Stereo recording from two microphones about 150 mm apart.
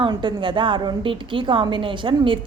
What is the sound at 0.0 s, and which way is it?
A woman's voice, 30° right (ahead or behind).